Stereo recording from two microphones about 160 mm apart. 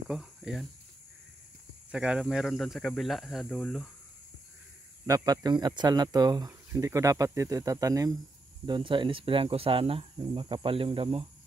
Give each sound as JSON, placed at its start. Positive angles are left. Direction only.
{"t": 0.1, "sound": "speech", "side_deg": 0}
{"t": 1.9, "sound": "speech", "side_deg": -5}
{"t": 5.0, "sound": "speech", "side_deg": -20}